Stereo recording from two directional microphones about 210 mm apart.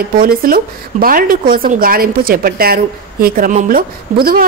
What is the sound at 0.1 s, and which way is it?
A woman's voice, 45° right (ahead or behind).